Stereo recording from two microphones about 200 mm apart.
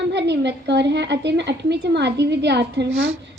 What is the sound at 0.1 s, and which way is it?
A woman's voice, 60° right (ahead or behind).